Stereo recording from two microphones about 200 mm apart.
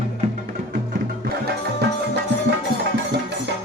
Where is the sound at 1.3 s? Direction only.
50° right (ahead or behind).